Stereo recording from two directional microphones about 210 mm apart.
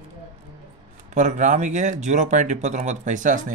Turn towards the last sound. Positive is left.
turn(degrees=-35)  # may be behind; listen again after turning